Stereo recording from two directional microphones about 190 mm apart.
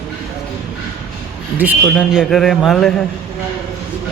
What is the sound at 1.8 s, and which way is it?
Speech, centre (ahead or behind).